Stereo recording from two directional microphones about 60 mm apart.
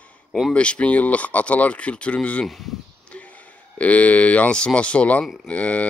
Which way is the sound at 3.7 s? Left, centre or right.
Left.